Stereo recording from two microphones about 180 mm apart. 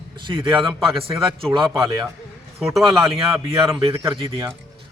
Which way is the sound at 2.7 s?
Centre (ahead or behind).